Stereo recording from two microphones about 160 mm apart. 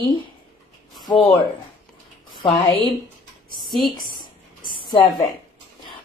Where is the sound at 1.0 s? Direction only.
30° left (ahead or behind).